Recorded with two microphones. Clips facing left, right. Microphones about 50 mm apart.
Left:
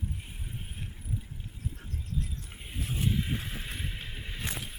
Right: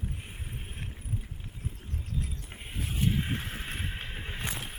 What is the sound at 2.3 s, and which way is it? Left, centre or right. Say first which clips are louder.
Vehicle: right 1 dB; right.